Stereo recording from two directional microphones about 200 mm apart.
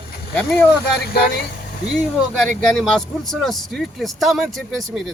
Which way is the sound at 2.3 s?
5° left (ahead or behind).